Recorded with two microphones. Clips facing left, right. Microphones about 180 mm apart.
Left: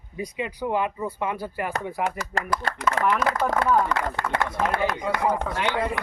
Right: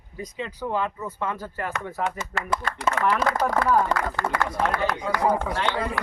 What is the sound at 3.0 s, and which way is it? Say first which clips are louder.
Speech: even; 30° left (ahead or behind).